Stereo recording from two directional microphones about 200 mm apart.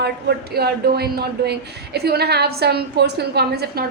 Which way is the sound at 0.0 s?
55° right (ahead or behind).